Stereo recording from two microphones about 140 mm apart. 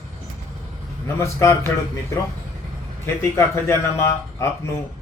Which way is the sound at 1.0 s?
20° left (ahead or behind).